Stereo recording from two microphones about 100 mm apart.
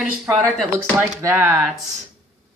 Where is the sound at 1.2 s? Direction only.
25° right (ahead or behind).